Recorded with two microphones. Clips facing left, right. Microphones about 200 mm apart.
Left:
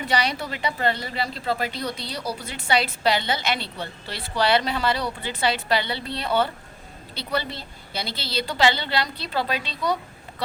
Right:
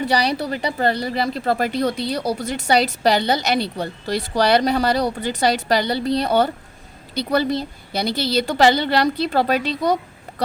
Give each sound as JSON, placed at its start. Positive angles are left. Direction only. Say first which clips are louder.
{"t": 0.0, "sound": "a woman's voice", "louder": "right 5 dB", "side_deg": -35}